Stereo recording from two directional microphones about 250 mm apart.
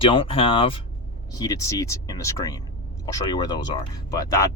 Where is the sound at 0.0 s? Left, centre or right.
Left.